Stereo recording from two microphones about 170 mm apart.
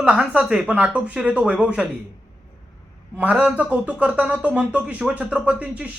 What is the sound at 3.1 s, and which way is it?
Speech, 10° right (ahead or behind).